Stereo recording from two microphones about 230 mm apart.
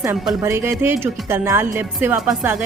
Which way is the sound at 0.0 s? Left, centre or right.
Centre.